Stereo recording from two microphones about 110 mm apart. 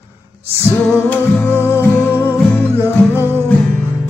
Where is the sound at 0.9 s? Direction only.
20° left (ahead or behind).